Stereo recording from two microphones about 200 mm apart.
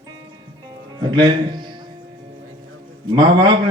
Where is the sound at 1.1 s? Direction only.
20° right (ahead or behind).